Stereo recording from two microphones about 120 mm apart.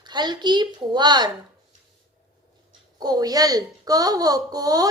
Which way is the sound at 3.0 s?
35° right (ahead or behind).